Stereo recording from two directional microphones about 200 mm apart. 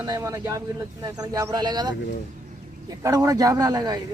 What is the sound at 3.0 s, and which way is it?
Speech, 20° right (ahead or behind).